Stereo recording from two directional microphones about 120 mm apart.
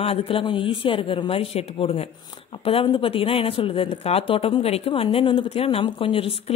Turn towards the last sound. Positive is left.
turn(degrees=50)  # may be behind; listen again after turning